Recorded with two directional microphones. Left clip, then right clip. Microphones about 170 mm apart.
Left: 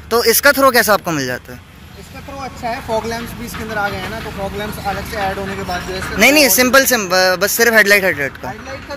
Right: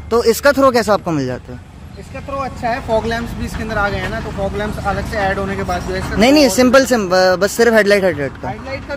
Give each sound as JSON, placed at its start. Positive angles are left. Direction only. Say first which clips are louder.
{"t": 0.1, "sound": "speech", "louder": "even", "side_deg": -10}
{"t": 2.4, "sound": "speech", "louder": "right 1 dB", "side_deg": -5}
{"t": 6.1, "sound": "speech", "louder": "left 1 dB", "side_deg": -20}